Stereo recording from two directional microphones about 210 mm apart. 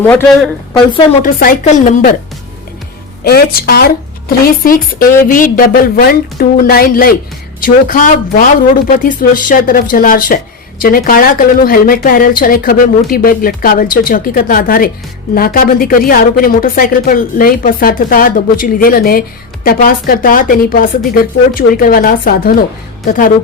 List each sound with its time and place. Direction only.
0.0 s a woman's voice: 10° left (ahead or behind)
1.2 s speech: 40° left (ahead or behind)
3.2 s speech: 45° left (ahead or behind)